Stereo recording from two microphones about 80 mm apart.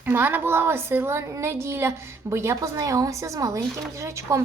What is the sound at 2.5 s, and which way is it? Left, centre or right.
A woman's voice, right.